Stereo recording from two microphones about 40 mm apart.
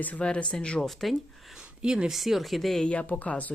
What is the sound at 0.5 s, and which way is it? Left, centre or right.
Speech, left.